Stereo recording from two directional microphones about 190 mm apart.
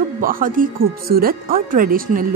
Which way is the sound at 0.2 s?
45° right (ahead or behind).